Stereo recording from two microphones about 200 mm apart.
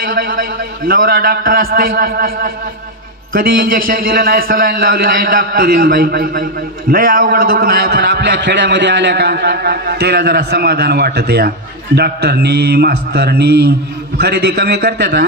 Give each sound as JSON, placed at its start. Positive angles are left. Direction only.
{"t": 0.0, "sound": "a man's voice", "side_deg": -45}